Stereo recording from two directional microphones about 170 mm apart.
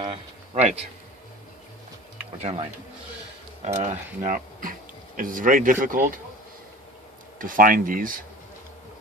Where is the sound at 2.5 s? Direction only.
25° right (ahead or behind).